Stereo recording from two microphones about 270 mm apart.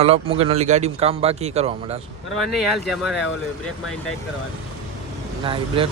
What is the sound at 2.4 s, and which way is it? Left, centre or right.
Speech, centre.